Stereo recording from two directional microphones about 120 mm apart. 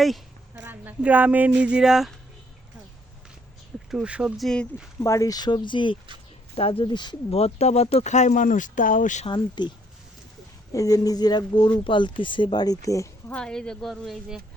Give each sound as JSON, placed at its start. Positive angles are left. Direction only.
{"t": 0.5, "sound": "speech", "side_deg": -15}
{"t": 3.9, "sound": "speech", "side_deg": -5}
{"t": 5.0, "sound": "speech", "side_deg": 25}
{"t": 7.3, "sound": "speech", "side_deg": 60}
{"t": 9.2, "sound": "speech", "side_deg": 40}
{"t": 10.7, "sound": "speech", "side_deg": 30}
{"t": 13.2, "sound": "speech", "side_deg": 10}